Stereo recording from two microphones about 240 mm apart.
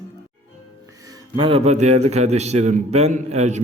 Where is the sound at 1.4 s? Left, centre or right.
Right.